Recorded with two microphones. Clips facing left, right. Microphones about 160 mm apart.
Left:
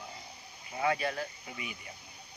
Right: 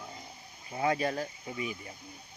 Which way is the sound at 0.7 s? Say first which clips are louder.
Right 2 dB; 35° right (ahead or behind).